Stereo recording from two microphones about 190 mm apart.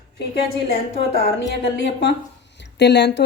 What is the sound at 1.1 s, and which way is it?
A woman's voice, 70° left (ahead or behind).